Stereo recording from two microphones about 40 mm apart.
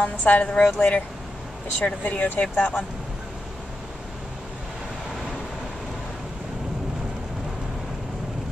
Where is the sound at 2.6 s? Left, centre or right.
Left.